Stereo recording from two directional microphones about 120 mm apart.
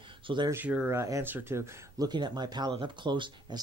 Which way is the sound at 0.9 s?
25° right (ahead or behind).